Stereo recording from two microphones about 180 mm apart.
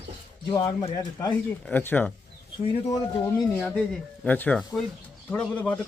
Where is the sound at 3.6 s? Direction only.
5° left (ahead or behind).